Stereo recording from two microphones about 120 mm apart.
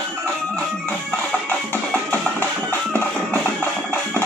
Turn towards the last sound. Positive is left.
turn(degrees=10)  # may be behind; listen again after turning